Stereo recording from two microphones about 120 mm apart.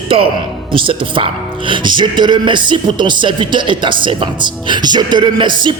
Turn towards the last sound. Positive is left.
turn(degrees=-40)  # may be behind; listen again after turning